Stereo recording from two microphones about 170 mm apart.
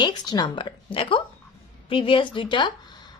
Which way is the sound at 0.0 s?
25° left (ahead or behind).